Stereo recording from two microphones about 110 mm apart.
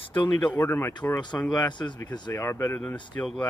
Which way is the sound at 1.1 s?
40° left (ahead or behind).